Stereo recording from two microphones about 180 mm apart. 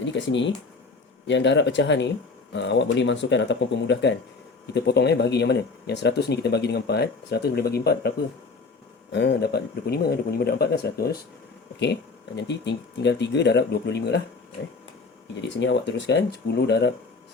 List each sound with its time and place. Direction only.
0.0 s speech: 90° left; by 8.1 s 65° left (ahead or behind)
9.1 s speech: 70° left (ahead or behind)
12.4 s speech: 75° left (ahead or behind)
15.4 s speech: 90° left; by 16.9 s 70° left (ahead or behind)